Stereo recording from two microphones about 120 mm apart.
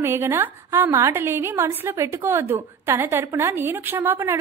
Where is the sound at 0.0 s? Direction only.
20° right (ahead or behind).